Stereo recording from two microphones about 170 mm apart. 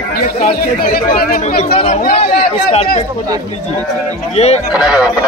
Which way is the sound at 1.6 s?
35° left (ahead or behind).